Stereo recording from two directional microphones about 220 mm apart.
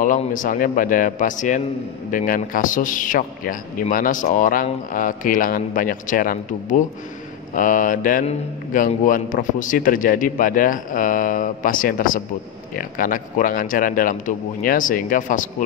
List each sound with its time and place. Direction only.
0.0 s a man's voice: 35° left (ahead or behind)